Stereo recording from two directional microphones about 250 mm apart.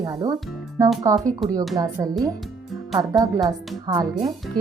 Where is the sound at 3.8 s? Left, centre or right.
Centre.